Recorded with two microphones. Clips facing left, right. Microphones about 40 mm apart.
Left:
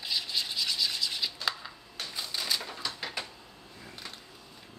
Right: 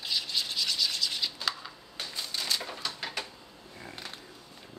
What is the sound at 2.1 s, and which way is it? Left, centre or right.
Typewriter, centre.